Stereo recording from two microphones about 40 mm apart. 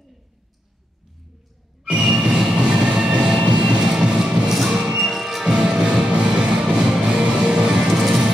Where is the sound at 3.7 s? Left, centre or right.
Right.